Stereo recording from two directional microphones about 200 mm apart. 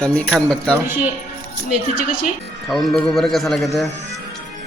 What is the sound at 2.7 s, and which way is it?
Speech, centre (ahead or behind).